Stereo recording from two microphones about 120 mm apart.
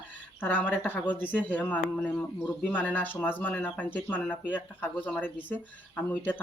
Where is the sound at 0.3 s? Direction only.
15° left (ahead or behind).